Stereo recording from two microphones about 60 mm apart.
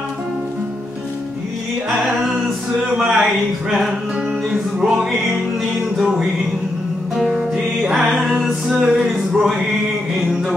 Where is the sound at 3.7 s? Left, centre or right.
Centre.